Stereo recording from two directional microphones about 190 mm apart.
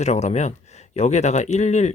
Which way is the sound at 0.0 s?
35° left (ahead or behind).